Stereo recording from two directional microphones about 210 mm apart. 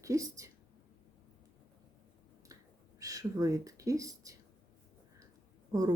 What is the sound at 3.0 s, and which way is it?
Speech, 15° right (ahead or behind).